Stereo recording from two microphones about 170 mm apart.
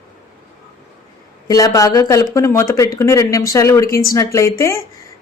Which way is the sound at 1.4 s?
20° left (ahead or behind).